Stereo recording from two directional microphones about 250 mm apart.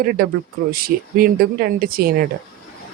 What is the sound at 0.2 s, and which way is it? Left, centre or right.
Speech, right.